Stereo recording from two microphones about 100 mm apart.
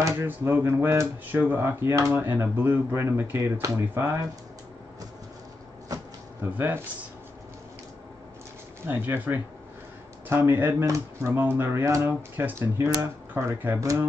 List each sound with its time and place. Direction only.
0.0 s speech: 25° right (ahead or behind)
6.5 s speech: 20° right (ahead or behind)
8.8 s speech: 20° right (ahead or behind)